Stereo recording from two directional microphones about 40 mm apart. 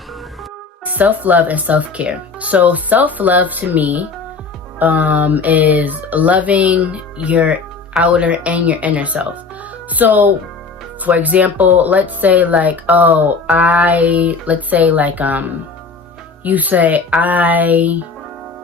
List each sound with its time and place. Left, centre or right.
0.9 s speech: right
9.9 s speech: right